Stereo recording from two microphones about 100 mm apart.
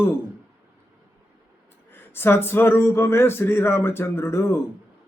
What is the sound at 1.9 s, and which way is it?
Speech, 20° left (ahead or behind).